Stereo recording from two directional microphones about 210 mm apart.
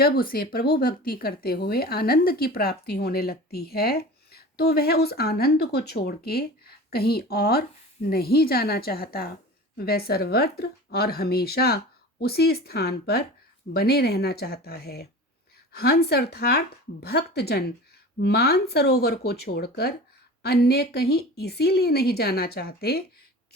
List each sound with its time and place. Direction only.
0.0 s speech: 45° left (ahead or behind)